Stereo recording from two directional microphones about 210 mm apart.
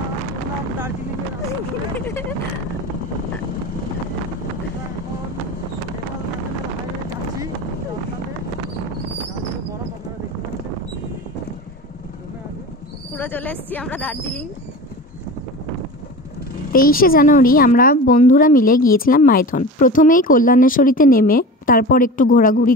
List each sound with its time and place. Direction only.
2.0 s vehicle: 10° left (ahead or behind)
13.1 s speech: 10° left (ahead or behind)
16.7 s a woman's voice: 45° left (ahead or behind)